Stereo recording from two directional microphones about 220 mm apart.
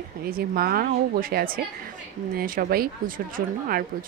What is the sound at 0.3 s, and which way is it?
Speech, 45° right (ahead or behind).